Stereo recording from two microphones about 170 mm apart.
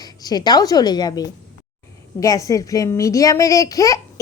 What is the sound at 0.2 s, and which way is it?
Speech, 25° left (ahead or behind).